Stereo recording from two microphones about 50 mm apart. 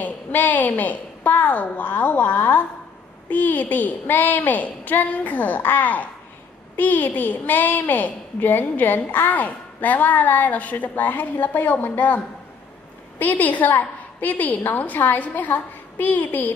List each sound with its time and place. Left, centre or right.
0.0 s a woman's voice: left
13.2 s a woman's voice: left